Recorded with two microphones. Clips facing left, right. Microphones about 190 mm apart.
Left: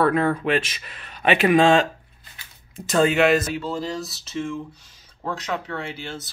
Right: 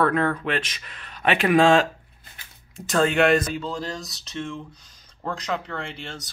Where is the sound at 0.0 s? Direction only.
10° left (ahead or behind).